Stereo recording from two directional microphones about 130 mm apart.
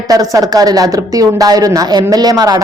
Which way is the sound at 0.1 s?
30° right (ahead or behind).